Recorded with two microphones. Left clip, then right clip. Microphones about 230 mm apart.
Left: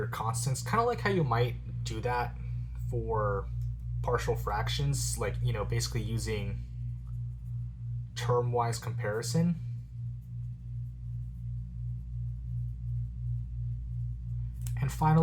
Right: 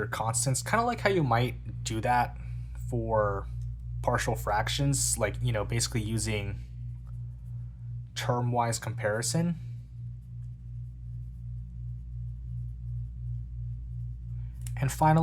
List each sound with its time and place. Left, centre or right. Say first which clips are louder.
0.1 s speech: right 4 dB; right
8.1 s speech: even; right
14.7 s speech: right 5 dB; right